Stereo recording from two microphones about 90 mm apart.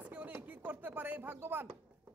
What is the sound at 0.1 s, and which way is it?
Chopping, 15° right (ahead or behind).